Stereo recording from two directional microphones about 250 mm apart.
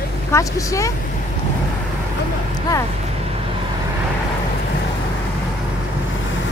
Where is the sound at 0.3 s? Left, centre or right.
Centre.